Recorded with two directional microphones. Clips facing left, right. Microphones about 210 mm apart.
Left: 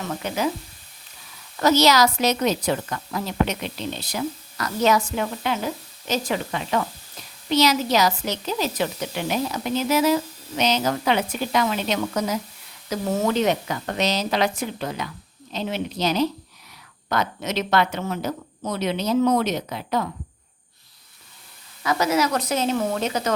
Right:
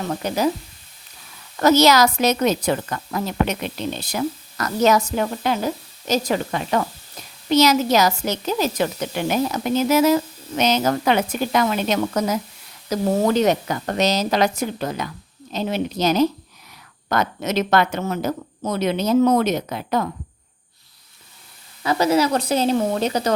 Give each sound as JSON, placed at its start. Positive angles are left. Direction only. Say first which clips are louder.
{"t": 0.0, "sound": "sizzle", "louder": "right 4 dB", "side_deg": -40}
{"t": 1.5, "sound": "a woman's voice", "louder": "right 3 dB", "side_deg": -50}
{"t": 12.9, "sound": "a woman's voice", "louder": "right 4 dB", "side_deg": -35}
{"t": 21.8, "sound": "a woman's voice", "louder": "right 3 dB", "side_deg": -30}